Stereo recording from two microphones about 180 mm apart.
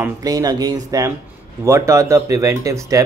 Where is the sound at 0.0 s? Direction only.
20° right (ahead or behind).